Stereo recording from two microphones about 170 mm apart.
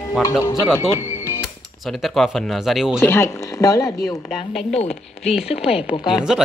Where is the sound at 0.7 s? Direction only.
15° left (ahead or behind).